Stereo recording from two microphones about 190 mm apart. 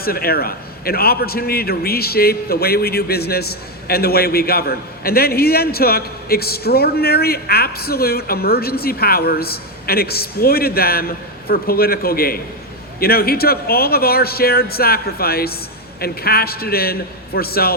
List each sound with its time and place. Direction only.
0.0 s a man's voice: 50° left (ahead or behind)